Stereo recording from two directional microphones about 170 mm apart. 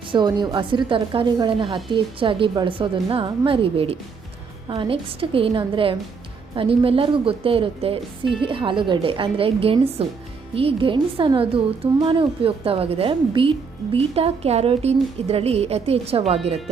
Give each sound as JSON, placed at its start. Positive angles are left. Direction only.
{"t": 0.1, "sound": "a woman's voice", "side_deg": -25}